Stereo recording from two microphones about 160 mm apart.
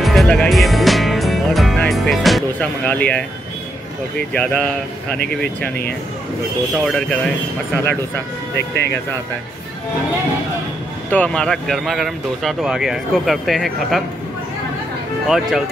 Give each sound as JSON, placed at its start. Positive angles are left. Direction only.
{"t": 0.0, "sound": "speech", "side_deg": 0}
{"t": 4.3, "sound": "speech", "side_deg": 5}
{"t": 6.8, "sound": "speech", "side_deg": 5}
{"t": 8.5, "sound": "speech", "side_deg": 90}
{"t": 11.1, "sound": "speech", "side_deg": 10}
{"t": 15.2, "sound": "speech", "side_deg": 0}